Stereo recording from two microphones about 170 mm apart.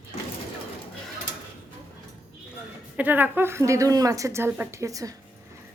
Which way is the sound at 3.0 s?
10° right (ahead or behind).